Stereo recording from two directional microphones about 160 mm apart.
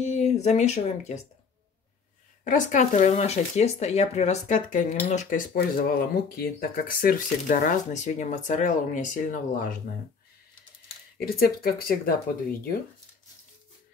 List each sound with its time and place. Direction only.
0.0 s speech: 45° left (ahead or behind)
2.4 s speech: 50° left (ahead or behind)
11.2 s speech: 70° left (ahead or behind)